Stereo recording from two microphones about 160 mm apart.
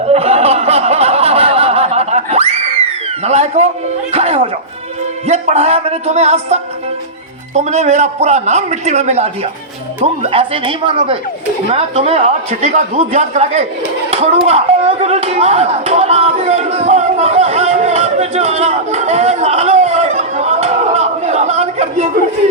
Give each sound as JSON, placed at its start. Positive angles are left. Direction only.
{"t": 0.0, "sound": "snicker", "side_deg": -40}
{"t": 3.2, "sound": "a man's voice", "side_deg": -45}
{"t": 14.1, "sound": "a sound", "side_deg": -40}